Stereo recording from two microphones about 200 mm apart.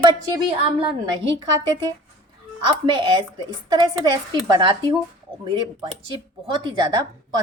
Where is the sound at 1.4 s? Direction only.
20° right (ahead or behind).